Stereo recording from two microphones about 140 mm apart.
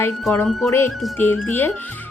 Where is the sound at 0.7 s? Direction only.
20° left (ahead or behind).